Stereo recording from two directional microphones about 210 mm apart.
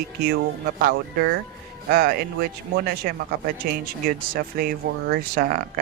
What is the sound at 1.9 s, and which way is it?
Speech, 45° right (ahead or behind).